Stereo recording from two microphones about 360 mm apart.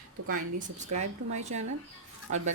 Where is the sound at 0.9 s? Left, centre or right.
Centre.